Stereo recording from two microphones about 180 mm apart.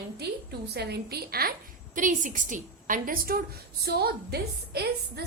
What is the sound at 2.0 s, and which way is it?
A woman's voice, 45° right (ahead or behind).